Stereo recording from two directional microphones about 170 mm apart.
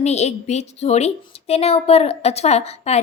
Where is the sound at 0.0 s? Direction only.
40° left (ahead or behind).